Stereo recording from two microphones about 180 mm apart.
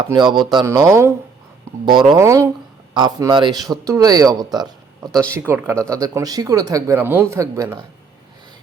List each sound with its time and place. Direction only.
0.0 s speech: 25° right (ahead or behind)